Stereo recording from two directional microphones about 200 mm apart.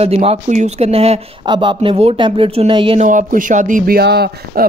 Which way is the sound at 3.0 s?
40° right (ahead or behind).